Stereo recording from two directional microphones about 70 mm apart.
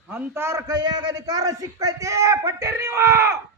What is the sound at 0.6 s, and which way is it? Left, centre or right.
Speech, right.